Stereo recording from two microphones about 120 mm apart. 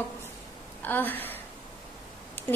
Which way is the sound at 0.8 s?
15° left (ahead or behind).